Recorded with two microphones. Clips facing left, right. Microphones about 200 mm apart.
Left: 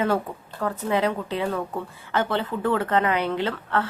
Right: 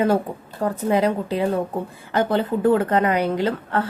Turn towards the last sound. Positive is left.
turn(degrees=-40)  # may be behind; listen again after turning